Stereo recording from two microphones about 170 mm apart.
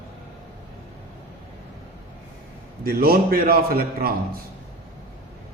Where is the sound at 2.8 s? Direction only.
65° right (ahead or behind).